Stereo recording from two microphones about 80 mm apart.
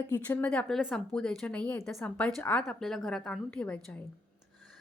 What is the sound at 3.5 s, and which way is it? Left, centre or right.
Speech, centre.